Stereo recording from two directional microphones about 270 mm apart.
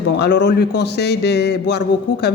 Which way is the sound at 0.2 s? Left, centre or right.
Left.